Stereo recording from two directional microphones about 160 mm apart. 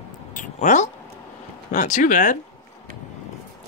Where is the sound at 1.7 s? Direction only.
55° left (ahead or behind).